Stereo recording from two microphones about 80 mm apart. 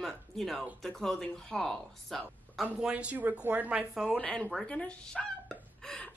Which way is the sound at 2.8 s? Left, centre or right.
Centre.